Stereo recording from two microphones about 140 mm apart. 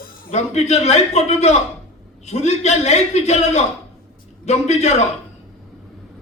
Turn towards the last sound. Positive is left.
turn(degrees=50)  # may be behind; listen again after turning